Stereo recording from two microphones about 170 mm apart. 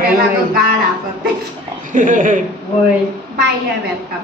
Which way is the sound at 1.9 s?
50° right (ahead or behind).